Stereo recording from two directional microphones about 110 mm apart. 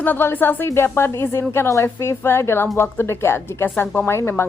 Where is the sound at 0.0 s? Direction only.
20° left (ahead or behind).